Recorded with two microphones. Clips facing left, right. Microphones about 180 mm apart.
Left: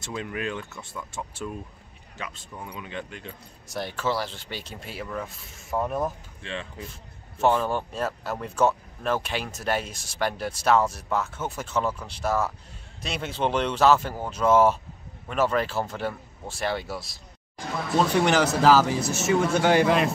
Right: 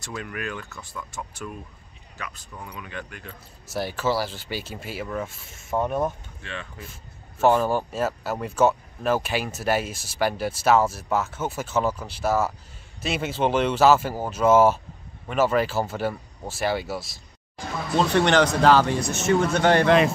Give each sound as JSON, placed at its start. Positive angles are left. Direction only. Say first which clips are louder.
{"t": 0.0, "sound": "speech", "louder": "left 2 dB", "side_deg": 25}
{"t": 3.6, "sound": "speech", "louder": "right 3 dB", "side_deg": -5}
{"t": 6.4, "sound": "speech", "louder": "left 2 dB", "side_deg": 30}
{"t": 7.3, "sound": "speech", "louder": "right 3 dB", "side_deg": -5}